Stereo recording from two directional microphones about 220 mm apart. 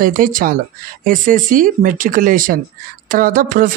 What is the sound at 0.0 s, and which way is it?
Speech, 40° right (ahead or behind).